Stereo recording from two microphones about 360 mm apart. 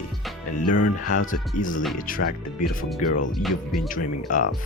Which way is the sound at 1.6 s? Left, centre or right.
Left.